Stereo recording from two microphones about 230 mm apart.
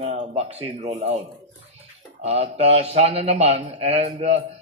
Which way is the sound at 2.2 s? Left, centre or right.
Right.